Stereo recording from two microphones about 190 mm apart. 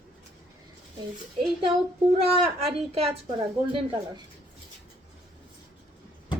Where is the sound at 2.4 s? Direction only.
30° right (ahead or behind).